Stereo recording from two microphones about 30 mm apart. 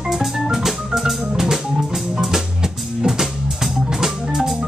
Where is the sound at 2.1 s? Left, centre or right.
Centre.